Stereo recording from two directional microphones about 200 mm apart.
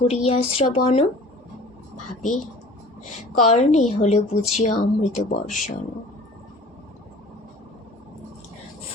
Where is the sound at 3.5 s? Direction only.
35° left (ahead or behind).